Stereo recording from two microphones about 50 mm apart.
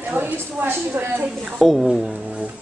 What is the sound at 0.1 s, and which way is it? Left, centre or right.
Speech, right.